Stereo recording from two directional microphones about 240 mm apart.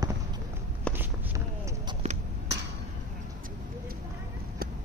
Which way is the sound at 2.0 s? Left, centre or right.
Right.